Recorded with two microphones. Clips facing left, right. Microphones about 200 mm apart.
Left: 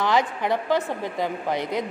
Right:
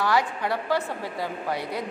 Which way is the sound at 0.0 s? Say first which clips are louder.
Left 2 dB; 20° left (ahead or behind).